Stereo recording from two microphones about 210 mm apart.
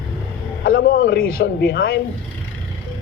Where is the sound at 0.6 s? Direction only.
40° left (ahead or behind).